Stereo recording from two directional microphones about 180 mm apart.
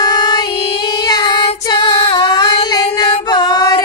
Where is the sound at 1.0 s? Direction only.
20° left (ahead or behind).